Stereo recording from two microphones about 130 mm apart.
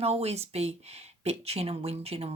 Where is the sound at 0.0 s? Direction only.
55° right (ahead or behind).